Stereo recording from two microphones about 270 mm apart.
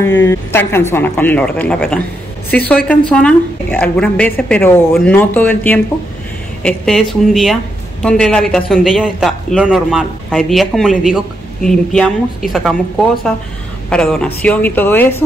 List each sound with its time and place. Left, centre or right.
0.0 s a man's voice: centre
13.8 s a man's voice: centre